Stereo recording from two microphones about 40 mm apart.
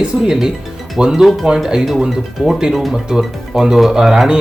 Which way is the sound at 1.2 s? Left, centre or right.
Centre.